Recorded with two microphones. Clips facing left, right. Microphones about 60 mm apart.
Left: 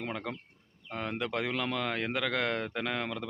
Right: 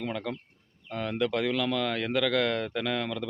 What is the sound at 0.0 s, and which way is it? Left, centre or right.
A man's voice, centre.